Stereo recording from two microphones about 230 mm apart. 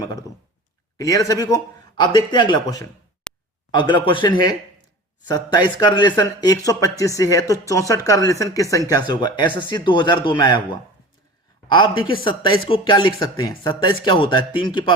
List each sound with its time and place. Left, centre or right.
0.0 s speech: centre
3.3 s a sound: centre
3.7 s speech: centre
11.7 s speech: left